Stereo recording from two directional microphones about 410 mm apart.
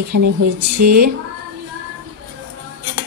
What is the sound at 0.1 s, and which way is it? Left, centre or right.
Speech, right.